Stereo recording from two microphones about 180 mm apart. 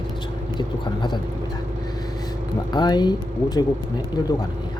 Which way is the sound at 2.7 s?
25° left (ahead or behind).